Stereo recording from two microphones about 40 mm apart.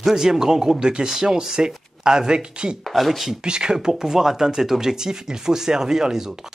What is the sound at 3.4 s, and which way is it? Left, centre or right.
Speech, right.